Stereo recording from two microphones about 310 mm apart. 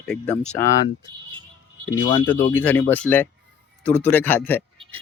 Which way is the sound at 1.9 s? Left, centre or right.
Centre.